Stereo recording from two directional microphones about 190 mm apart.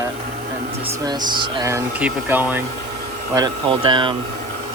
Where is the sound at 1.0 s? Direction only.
20° right (ahead or behind).